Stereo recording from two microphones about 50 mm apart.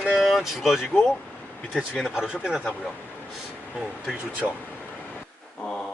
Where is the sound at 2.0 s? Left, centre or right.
Centre.